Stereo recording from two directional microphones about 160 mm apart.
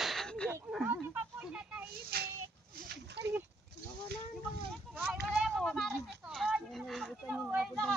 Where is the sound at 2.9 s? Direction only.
90° right.